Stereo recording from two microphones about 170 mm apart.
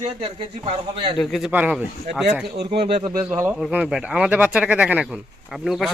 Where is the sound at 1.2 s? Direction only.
Centre (ahead or behind).